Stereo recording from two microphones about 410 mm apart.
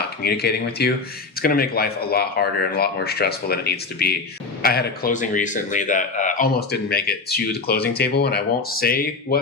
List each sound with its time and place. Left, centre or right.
0.0 s a man's voice: left